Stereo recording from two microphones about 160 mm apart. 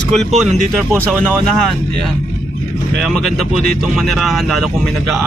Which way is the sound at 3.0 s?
Centre (ahead or behind).